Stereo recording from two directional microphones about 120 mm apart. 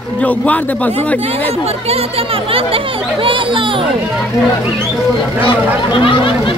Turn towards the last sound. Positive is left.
turn(degrees=45)  # may be behind; listen again after turning